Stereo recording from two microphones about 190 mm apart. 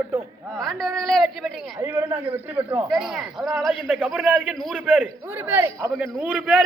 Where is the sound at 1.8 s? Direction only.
15° right (ahead or behind).